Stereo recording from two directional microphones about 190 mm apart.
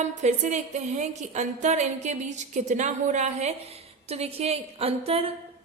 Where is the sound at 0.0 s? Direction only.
40° right (ahead or behind).